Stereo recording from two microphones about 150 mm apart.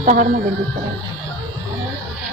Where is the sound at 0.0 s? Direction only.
65° right (ahead or behind).